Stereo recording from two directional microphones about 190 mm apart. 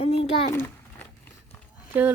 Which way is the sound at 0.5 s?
10° left (ahead or behind).